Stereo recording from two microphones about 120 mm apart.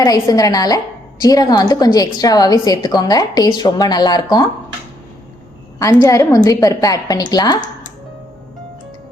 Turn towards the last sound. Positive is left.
turn(degrees=35)  # may be behind; listen again after turning